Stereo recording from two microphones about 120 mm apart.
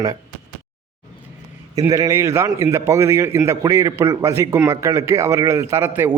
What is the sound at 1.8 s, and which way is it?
Speech, 30° right (ahead or behind).